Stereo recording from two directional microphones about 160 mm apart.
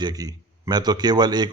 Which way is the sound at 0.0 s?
25° right (ahead or behind).